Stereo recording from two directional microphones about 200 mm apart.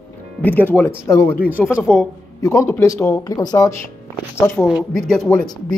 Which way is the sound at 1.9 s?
15° left (ahead or behind).